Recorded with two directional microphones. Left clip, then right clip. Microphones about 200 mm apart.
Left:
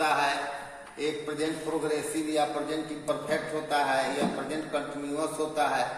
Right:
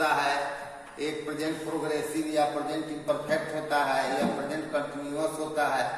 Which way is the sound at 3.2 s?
15° left (ahead or behind).